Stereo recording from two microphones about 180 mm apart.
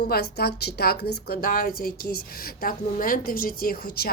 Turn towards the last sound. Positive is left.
turn(degrees=55)  # may be behind; listen again after turning